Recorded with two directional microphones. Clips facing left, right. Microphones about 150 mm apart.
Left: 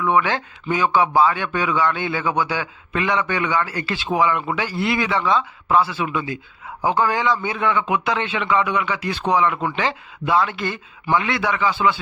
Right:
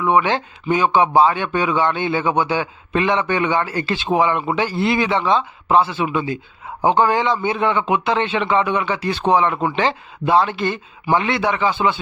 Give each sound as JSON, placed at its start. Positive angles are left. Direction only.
{"t": 0.0, "sound": "speech", "side_deg": -20}